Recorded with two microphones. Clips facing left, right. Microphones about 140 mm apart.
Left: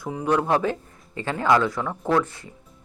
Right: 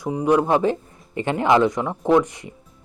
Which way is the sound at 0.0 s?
15° right (ahead or behind).